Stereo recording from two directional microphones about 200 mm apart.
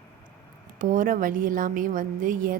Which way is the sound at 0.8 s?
40° right (ahead or behind).